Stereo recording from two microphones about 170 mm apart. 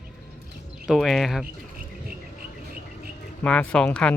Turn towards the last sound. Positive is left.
turn(degrees=5)  # may be behind; listen again after turning